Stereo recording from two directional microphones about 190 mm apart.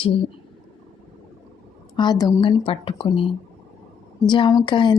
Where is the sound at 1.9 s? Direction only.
20° left (ahead or behind).